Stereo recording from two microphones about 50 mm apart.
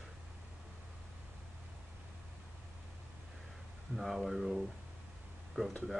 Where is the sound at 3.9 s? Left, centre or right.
Centre.